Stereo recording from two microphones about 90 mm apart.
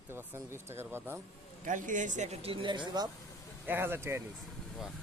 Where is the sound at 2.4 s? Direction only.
75° right (ahead or behind); by 3.1 s 50° right (ahead or behind).